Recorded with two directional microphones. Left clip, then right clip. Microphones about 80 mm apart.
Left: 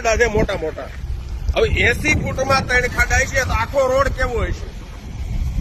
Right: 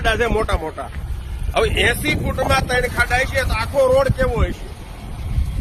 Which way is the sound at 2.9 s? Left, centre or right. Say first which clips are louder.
Even; left.